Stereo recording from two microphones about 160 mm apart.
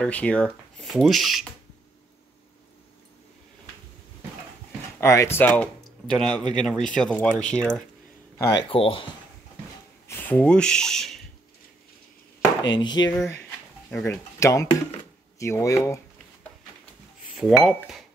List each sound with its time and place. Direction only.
0.0 s speech: 10° left (ahead or behind)
5.0 s speech: 15° left (ahead or behind)
8.4 s speech: 20° left (ahead or behind)
8.6 s speech: 35° left (ahead or behind)
10.0 s speech: 10° left (ahead or behind)
12.7 s speech: 25° left (ahead or behind)
13.8 s speech: 5° left (ahead or behind)
14.4 s speech: 20° left (ahead or behind)
17.4 s speech: centre (ahead or behind)